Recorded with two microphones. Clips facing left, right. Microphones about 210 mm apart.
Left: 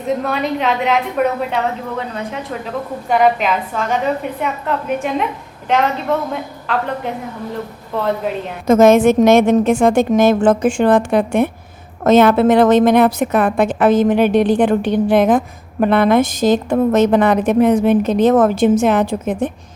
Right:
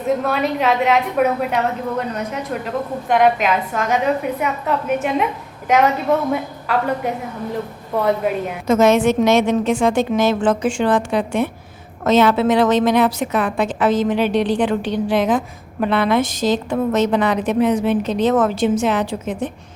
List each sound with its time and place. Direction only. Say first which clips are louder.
0.3 s a woman's voice: even; centre (ahead or behind)
8.6 s a woman's voice: left 5 dB; 50° left (ahead or behind)